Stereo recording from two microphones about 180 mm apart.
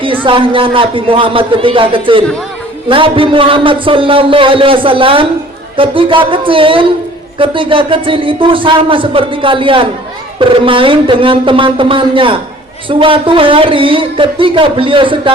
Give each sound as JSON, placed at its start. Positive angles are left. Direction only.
{"t": 0.0, "sound": "a man's voice", "side_deg": -30}